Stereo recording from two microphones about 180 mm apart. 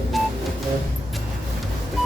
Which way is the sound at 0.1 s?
Centre (ahead or behind).